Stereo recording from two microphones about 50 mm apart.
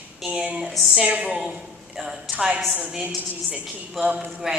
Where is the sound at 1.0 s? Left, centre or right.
Right.